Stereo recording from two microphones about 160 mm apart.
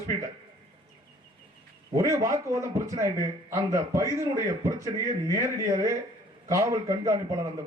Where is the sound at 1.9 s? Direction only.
20° right (ahead or behind).